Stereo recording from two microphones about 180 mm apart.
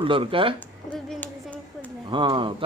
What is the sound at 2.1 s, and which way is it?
Speech, 25° right (ahead or behind).